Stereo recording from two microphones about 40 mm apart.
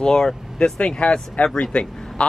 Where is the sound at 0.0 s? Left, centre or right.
Centre.